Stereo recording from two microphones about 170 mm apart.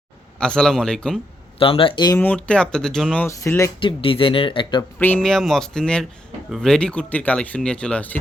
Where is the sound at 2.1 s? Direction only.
10° left (ahead or behind).